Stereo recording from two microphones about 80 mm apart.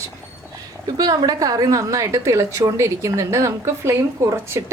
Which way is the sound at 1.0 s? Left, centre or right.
Right.